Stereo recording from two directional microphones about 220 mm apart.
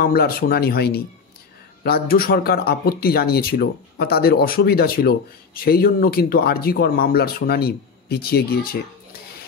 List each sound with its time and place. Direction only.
0.0 s speech: 40° left (ahead or behind)